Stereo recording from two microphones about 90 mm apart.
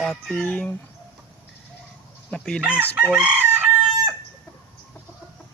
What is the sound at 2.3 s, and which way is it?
Chicken, 10° left (ahead or behind).